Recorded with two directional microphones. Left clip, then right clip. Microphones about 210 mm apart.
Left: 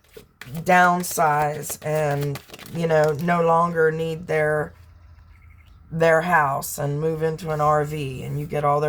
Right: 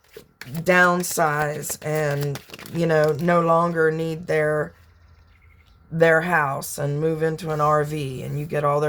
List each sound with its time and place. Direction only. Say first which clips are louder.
0.6 s speech: left 1 dB; 40° right (ahead or behind)
2.2 s speech: even; 20° right (ahead or behind)
2.7 s speech: even; 40° right (ahead or behind)
6.0 s speech: even; 35° right (ahead or behind)